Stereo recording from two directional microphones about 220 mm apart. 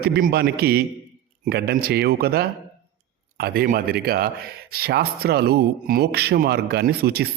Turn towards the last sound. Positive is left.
turn(degrees=-45)  # may be behind; listen again after turning